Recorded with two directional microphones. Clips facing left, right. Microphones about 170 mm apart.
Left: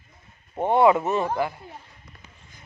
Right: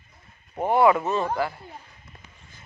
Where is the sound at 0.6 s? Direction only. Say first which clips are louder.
Left 1 dB; 20° left (ahead or behind).